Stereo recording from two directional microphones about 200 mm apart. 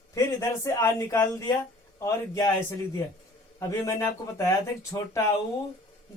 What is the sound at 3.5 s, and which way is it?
Speech, 15° left (ahead or behind).